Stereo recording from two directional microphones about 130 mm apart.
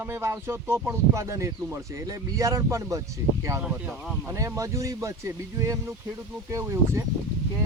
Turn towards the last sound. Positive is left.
turn(degrees=-25)  # may be behind; listen again after turning